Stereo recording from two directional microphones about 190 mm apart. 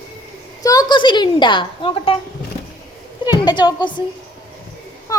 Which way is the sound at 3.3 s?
20° left (ahead or behind).